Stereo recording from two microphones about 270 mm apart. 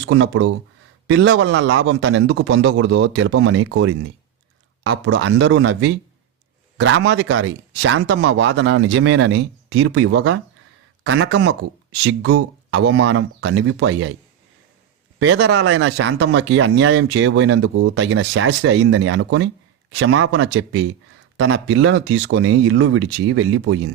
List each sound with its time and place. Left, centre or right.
0.0 s speech: right
12.0 s speech: right
15.2 s speech: right